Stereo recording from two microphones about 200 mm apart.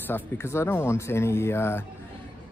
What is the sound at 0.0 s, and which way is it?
A man's voice, 10° left (ahead or behind).